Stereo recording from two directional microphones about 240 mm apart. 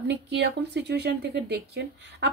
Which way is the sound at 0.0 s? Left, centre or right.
Right.